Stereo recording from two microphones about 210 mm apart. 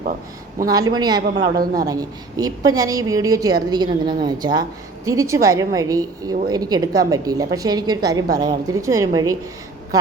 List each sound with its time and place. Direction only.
0.7 s a man's voice: 20° right (ahead or behind)